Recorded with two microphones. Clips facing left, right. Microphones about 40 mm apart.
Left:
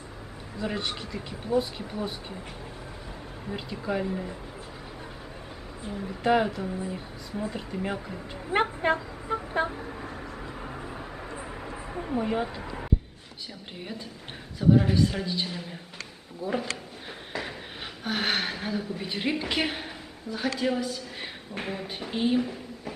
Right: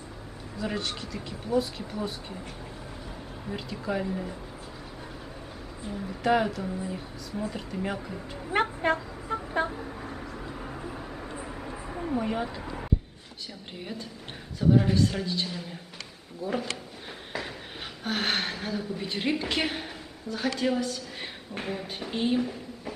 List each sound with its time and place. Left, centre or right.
0.7 s speech: centre
3.4 s speech: centre
5.9 s speech: centre
10.2 s vehicle: centre
13.7 s speech: centre
18.0 s a woman's voice: centre